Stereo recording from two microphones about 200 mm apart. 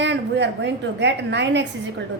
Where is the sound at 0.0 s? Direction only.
60° right (ahead or behind).